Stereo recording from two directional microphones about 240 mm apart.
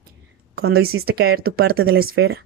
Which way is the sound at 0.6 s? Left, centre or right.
Right.